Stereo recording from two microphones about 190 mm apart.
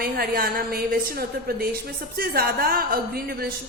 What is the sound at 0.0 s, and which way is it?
A woman's voice, 50° right (ahead or behind).